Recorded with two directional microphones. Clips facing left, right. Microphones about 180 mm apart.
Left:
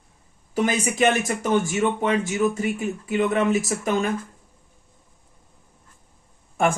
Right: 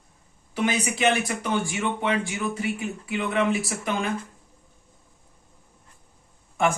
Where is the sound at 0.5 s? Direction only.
45° left (ahead or behind).